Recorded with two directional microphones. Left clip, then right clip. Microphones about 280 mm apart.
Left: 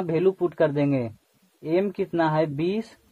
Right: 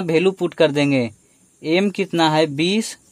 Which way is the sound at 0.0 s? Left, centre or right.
Right.